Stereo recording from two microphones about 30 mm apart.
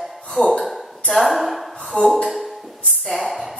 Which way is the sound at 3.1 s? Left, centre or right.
Centre.